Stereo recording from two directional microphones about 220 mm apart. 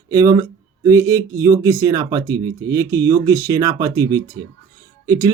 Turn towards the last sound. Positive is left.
turn(degrees=-15)  # may be behind; listen again after turning